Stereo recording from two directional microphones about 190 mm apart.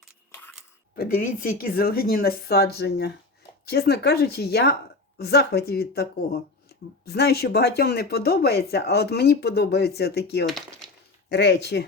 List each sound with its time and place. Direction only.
0.9 s a woman's voice: 45° left (ahead or behind)
10.4 s speech: centre (ahead or behind)
11.3 s speech: 60° left (ahead or behind)